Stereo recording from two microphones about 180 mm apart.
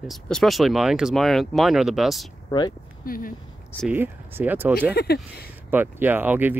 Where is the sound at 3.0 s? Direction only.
55° left (ahead or behind).